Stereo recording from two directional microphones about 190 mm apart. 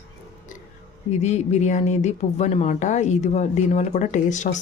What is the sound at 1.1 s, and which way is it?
Speech, 35° left (ahead or behind).